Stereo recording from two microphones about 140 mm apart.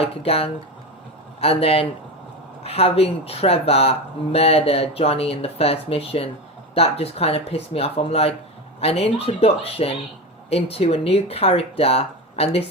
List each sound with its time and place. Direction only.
0.0 s speech: 45° left (ahead or behind)